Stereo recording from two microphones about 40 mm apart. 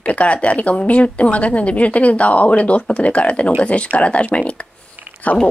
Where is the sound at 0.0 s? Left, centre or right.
Left.